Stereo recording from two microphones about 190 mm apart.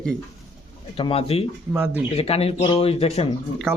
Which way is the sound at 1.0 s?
30° left (ahead or behind).